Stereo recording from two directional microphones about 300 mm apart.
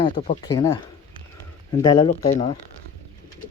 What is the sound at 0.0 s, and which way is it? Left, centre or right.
Speech, centre.